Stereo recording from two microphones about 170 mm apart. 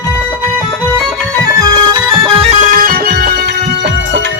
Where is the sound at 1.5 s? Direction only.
20° right (ahead or behind).